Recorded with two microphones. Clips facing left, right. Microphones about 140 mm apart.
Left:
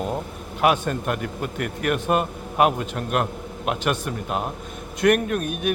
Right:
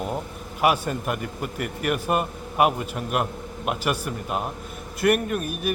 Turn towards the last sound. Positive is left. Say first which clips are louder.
# left 2 dB
turn(degrees=-5)  # may be behind; listen again after turning